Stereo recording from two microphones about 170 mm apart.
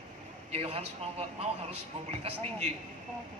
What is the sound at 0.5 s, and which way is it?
A man's voice, 35° right (ahead or behind).